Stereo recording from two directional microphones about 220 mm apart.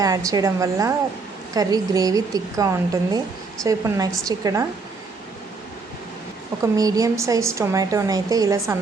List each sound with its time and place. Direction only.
0.0 s a woman's voice: 15° right (ahead or behind)
6.6 s a woman's voice: 15° right (ahead or behind)